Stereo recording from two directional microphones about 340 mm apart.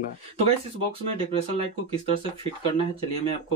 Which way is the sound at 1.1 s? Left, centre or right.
Centre.